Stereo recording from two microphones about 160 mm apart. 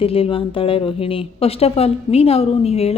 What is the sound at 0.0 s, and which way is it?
A woman's voice, 35° left (ahead or behind).